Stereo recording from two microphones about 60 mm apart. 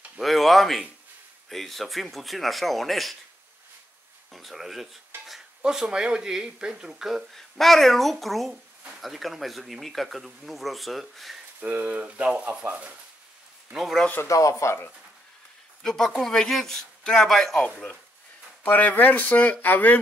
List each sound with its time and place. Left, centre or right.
0.2 s speech: centre
4.3 s speech: centre
7.3 s speech: centre
11.6 s speech: right
14.2 s speech: left
15.8 s speech: centre
17.6 s speech: centre
18.6 s speech: left